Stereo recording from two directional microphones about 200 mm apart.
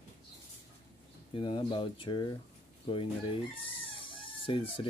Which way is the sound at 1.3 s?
25° left (ahead or behind).